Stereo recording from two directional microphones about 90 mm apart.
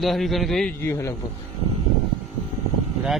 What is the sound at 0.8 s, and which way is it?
Speech, 30° left (ahead or behind).